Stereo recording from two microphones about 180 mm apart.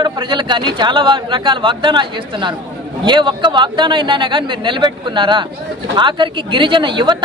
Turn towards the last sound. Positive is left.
turn(degrees=-25)  # may be behind; listen again after turning